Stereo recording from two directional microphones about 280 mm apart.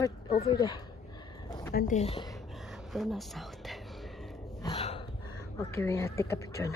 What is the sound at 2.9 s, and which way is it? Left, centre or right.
Speech, centre.